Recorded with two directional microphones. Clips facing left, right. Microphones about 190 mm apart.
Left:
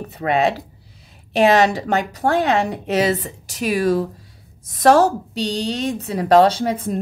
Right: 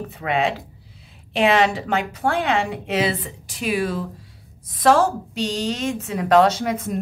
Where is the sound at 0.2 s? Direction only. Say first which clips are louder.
Left 4 dB; 40° left (ahead or behind).